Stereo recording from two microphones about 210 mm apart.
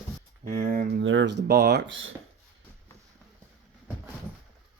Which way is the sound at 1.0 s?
60° right (ahead or behind).